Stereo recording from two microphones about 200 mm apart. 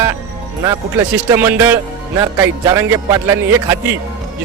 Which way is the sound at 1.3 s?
10° right (ahead or behind).